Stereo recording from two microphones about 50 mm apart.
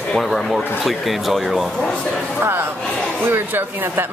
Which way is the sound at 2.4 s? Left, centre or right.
Right.